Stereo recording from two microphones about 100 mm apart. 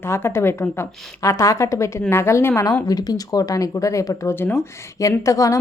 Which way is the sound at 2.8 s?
40° left (ahead or behind).